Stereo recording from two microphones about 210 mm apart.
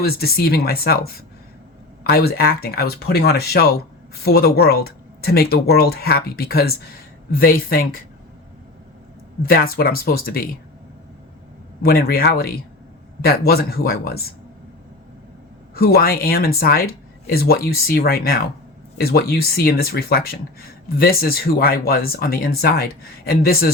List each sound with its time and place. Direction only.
0.0 s speech: 45° left (ahead or behind)
2.0 s speech: 45° left (ahead or behind)
9.5 s speech: 45° left (ahead or behind)
11.8 s speech: 45° left (ahead or behind)
15.7 s speech: 45° left (ahead or behind)